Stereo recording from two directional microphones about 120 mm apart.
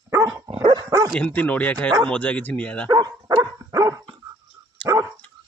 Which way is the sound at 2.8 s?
35° right (ahead or behind).